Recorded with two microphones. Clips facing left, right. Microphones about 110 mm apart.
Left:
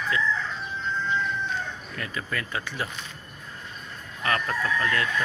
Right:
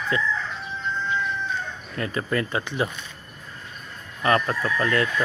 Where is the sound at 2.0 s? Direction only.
35° right (ahead or behind).